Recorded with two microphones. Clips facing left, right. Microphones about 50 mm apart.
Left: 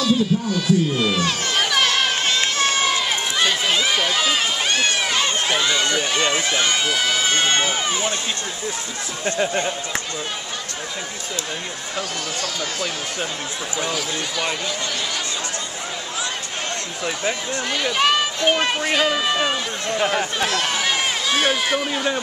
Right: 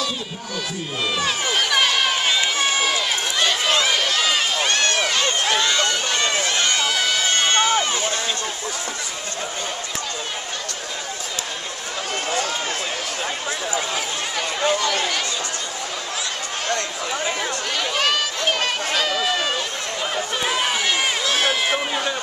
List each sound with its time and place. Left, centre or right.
0.0 s speech: centre
1.7 s run: centre
17.9 s speech: centre
20.4 s run: centre
21.3 s run: centre
21.6 s speech: centre